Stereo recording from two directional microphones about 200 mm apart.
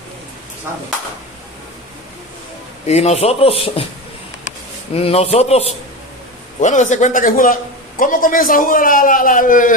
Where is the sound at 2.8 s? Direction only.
35° left (ahead or behind).